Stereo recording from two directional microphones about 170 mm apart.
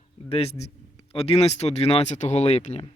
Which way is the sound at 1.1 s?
35° left (ahead or behind).